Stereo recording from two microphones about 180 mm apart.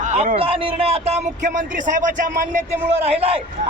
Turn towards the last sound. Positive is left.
turn(degrees=-35)  # may be behind; listen again after turning